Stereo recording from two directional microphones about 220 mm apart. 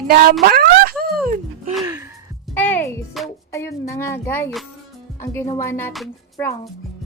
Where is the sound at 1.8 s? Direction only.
15° right (ahead or behind).